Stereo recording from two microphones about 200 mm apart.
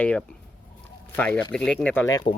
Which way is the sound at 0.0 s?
5° left (ahead or behind).